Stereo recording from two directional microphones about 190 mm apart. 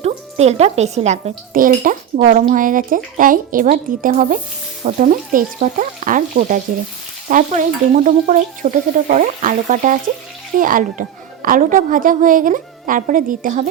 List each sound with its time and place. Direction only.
0.0 s speech: 35° right (ahead or behind)